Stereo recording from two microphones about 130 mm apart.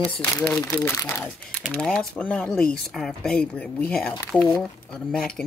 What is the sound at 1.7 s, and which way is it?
Speech, 5° left (ahead or behind).